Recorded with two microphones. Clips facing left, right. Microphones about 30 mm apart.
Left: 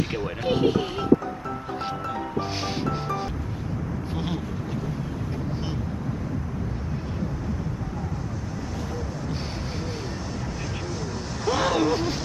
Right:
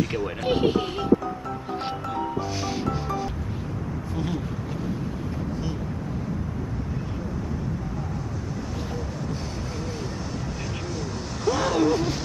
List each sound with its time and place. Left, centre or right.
0.5 s speech: centre
4.1 s speech: left
10.9 s vehicle: centre
11.5 s a sound: centre